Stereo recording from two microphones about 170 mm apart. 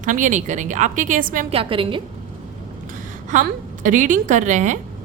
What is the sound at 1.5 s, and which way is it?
Speech, 30° right (ahead or behind).